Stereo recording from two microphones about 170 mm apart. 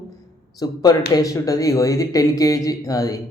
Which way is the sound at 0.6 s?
20° left (ahead or behind).